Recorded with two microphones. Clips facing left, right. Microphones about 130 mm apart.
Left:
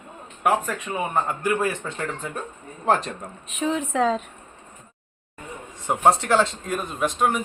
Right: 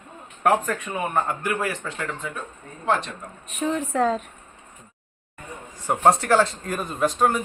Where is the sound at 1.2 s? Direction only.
20° left (ahead or behind).